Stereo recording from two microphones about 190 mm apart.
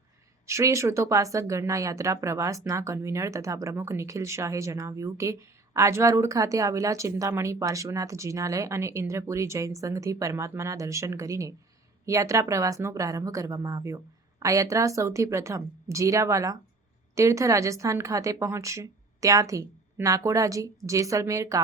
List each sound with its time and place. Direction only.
0.4 s speech: 15° right (ahead or behind)